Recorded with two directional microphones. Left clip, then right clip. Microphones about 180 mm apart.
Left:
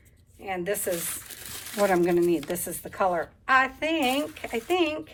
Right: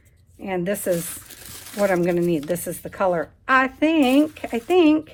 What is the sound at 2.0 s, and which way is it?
A woman's voice, 25° right (ahead or behind).